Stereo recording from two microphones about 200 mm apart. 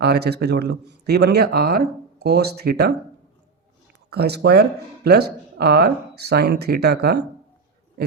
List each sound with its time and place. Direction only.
0.0 s speech: 55° right (ahead or behind)
4.1 s speech: 55° right (ahead or behind)